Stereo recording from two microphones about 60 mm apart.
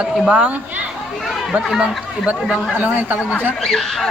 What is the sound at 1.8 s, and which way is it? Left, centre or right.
Speech, right.